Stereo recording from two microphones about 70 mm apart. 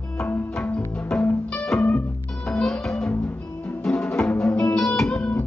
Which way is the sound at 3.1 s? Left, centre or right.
Left.